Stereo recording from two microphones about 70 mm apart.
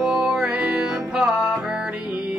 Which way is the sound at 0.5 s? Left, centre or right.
Centre.